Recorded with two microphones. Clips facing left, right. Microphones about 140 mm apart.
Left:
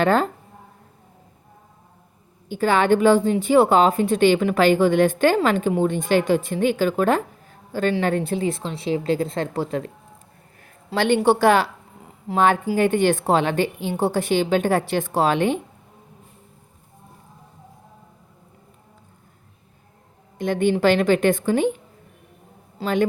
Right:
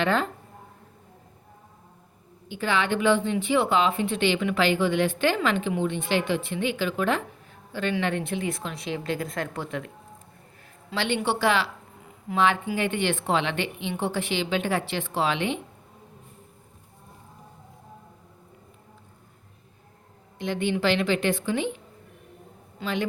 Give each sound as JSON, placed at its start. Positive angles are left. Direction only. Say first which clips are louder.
{"t": 0.0, "sound": "speech", "louder": "left 6 dB", "side_deg": 40}
{"t": 2.5, "sound": "speech", "louder": "left 8 dB", "side_deg": 45}
{"t": 10.9, "sound": "speech", "louder": "left 8 dB", "side_deg": 45}
{"t": 20.4, "sound": "speech", "louder": "left 7 dB", "side_deg": 45}
{"t": 22.8, "sound": "speech", "louder": "left 8 dB", "side_deg": 45}